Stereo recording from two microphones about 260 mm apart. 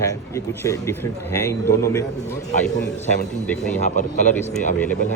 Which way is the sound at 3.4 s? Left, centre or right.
Centre.